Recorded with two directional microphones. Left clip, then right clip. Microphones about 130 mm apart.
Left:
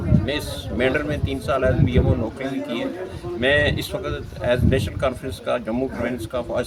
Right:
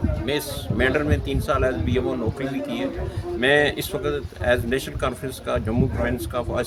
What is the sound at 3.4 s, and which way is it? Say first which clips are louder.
Speech: even; 25° right (ahead or behind).